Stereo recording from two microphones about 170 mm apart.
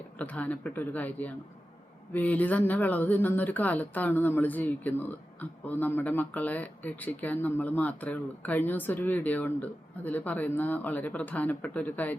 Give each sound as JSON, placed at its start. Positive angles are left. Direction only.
{"t": 0.2, "sound": "speech", "side_deg": 10}